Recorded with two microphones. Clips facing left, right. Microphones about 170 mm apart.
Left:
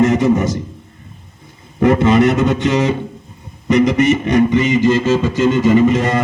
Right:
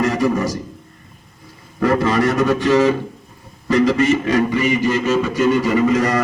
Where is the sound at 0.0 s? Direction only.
20° left (ahead or behind).